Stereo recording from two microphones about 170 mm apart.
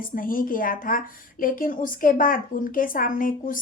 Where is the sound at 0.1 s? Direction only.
55° left (ahead or behind).